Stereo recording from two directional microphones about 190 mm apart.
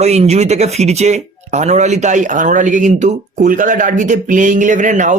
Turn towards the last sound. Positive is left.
turn(degrees=-40)  # may be behind; listen again after turning